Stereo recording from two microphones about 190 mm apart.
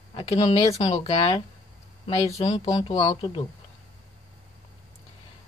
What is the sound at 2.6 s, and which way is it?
Speech, 20° left (ahead or behind).